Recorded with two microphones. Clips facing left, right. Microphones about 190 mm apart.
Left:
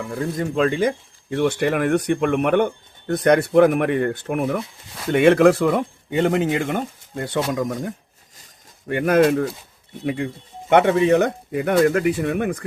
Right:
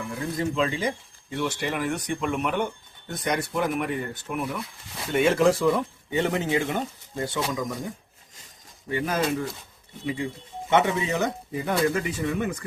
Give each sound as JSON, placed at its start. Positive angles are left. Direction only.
{"t": 0.3, "sound": "speech", "side_deg": 50}
{"t": 10.7, "sound": "speech", "side_deg": 60}